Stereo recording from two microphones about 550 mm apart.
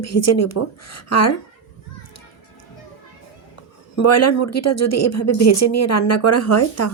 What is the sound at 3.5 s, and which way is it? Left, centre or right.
Speech, left.